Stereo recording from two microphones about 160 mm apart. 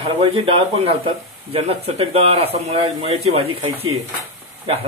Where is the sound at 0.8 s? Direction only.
35° right (ahead or behind).